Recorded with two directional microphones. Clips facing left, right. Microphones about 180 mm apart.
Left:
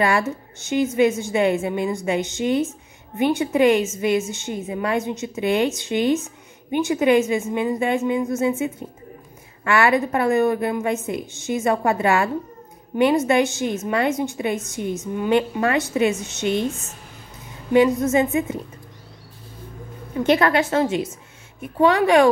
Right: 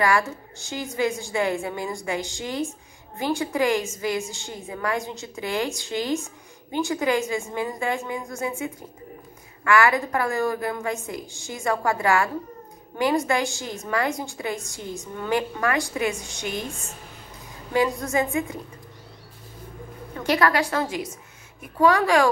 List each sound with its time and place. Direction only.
0.0 s a woman's voice: 20° left (ahead or behind)
17.7 s a woman's voice: 20° left (ahead or behind)
20.2 s a woman's voice: 25° left (ahead or behind)